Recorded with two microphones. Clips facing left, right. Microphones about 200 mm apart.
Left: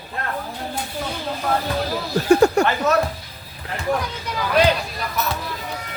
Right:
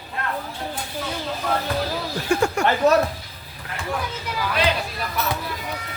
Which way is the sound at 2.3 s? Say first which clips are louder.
Left 7 dB; 35° left (ahead or behind).